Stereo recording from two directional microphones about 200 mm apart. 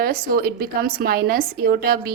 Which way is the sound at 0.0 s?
50° right (ahead or behind).